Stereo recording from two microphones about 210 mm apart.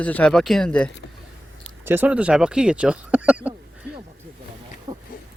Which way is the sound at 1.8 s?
10° right (ahead or behind).